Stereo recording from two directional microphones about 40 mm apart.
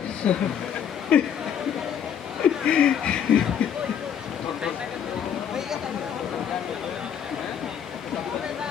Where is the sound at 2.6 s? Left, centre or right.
Left.